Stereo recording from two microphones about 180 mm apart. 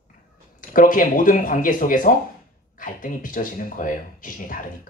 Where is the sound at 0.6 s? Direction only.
50° left (ahead or behind).